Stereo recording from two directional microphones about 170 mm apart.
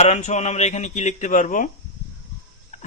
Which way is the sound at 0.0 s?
40° left (ahead or behind).